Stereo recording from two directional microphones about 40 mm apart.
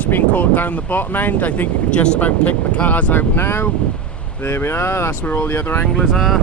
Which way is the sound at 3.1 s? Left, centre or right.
Left.